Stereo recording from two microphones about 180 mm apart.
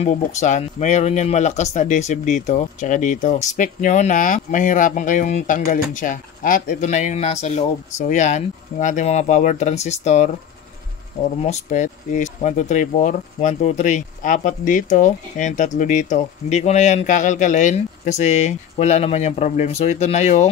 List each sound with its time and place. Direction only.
0.0 s speech: 40° left (ahead or behind)